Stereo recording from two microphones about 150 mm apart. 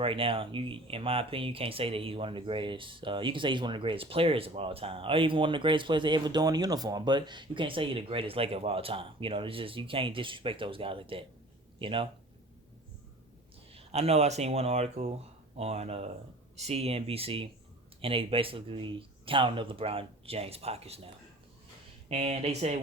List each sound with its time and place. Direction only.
0.0 s speech: 35° right (ahead or behind)
13.7 s speech: 45° right (ahead or behind)
22.1 s speech: 45° right (ahead or behind)